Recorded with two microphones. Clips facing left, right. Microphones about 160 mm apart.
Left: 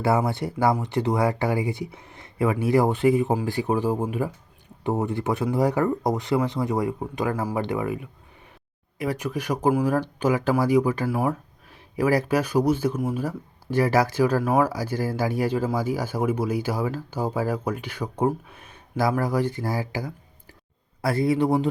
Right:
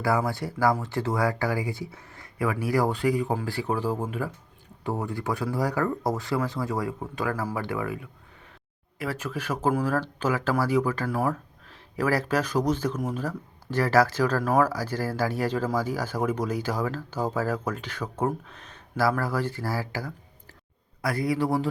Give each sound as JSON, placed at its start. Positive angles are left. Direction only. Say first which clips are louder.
{"t": 0.0, "sound": "speech", "louder": "left 3 dB", "side_deg": 20}
{"t": 21.0, "sound": "speech", "louder": "left 4 dB", "side_deg": 25}